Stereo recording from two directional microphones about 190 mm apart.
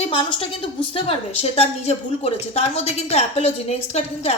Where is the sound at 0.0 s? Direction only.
30° left (ahead or behind).